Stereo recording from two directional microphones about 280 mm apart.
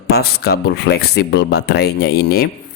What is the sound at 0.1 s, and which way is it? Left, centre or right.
Speech, left.